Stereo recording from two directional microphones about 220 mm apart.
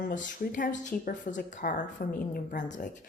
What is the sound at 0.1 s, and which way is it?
Speech, 35° left (ahead or behind).